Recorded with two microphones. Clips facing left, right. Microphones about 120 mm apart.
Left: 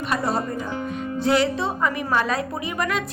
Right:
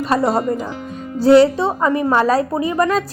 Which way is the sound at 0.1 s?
30° right (ahead or behind).